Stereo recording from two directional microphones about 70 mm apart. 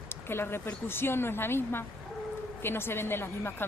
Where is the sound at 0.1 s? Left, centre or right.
Left.